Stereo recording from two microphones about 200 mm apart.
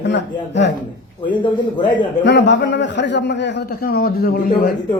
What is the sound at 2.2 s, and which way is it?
A man's voice, 60° left (ahead or behind).